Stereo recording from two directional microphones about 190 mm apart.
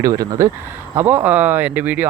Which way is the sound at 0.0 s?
20° right (ahead or behind).